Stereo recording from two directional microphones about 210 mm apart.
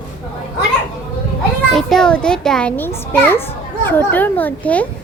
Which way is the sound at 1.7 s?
Centre (ahead or behind).